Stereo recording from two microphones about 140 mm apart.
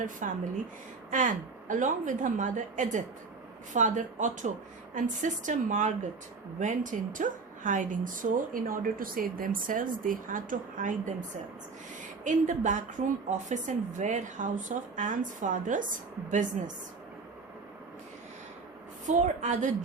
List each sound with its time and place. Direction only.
0.0 s a woman's voice: 70° right (ahead or behind)
12.2 s a woman's voice: 60° right (ahead or behind)
19.0 s a woman's voice: 60° right (ahead or behind)